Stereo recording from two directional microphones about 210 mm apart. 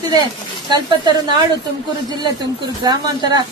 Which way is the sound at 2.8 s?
20° right (ahead or behind).